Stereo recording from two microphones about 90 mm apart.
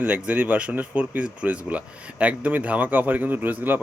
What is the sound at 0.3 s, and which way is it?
Speech, 15° right (ahead or behind).